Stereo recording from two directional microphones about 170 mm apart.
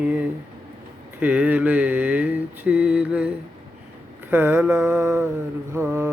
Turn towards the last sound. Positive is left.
turn(degrees=-15)  # may be behind; listen again after turning